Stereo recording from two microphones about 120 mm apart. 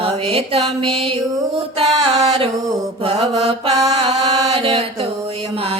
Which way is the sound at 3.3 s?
50° right (ahead or behind).